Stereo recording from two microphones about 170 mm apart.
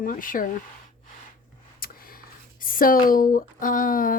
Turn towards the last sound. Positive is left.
turn(degrees=55)  # may be behind; listen again after turning